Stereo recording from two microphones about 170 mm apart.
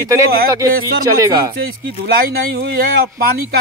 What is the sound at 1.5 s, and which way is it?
Speech, 65° right (ahead or behind).